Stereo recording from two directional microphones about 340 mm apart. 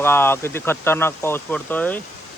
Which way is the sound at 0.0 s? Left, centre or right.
Centre.